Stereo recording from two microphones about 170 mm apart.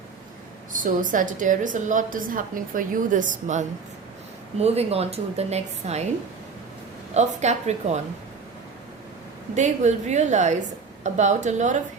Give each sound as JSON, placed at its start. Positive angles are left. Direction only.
{"t": 0.7, "sound": "a woman's voice", "side_deg": -50}
{"t": 7.1, "sound": "a woman's voice", "side_deg": -40}
{"t": 9.6, "sound": "a woman's voice", "side_deg": -45}